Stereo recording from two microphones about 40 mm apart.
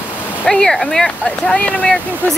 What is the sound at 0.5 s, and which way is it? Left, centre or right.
Speech, left.